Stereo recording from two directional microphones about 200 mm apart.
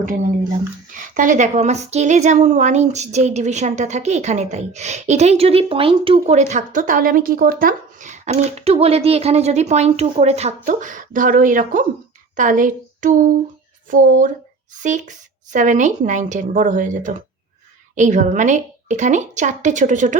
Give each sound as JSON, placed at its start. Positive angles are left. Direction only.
{"t": 1.1, "sound": "a woman's voice", "side_deg": -40}